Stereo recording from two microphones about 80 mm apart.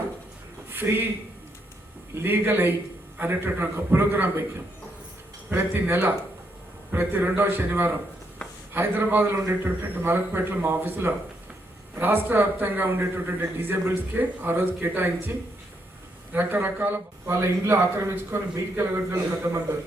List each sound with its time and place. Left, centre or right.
0.7 s a man's voice: right
2.2 s a man's voice: right
5.5 s a man's voice: right
17.3 s a man's voice: right